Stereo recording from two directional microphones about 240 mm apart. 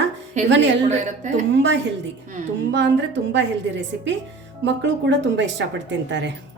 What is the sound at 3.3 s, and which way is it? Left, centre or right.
A woman's voice, right.